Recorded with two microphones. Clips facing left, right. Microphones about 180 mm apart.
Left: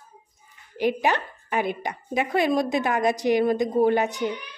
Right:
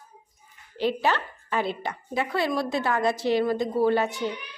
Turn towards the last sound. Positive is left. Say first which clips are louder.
# left 2 dB
turn(degrees=20)  # may be behind; listen again after turning